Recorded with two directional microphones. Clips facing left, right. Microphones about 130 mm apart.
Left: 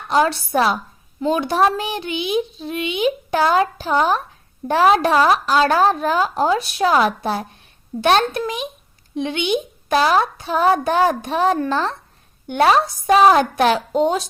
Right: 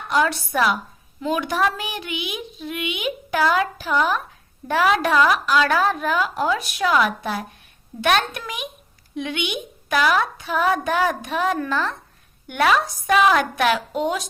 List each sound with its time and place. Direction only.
0.1 s speech: 30° left (ahead or behind)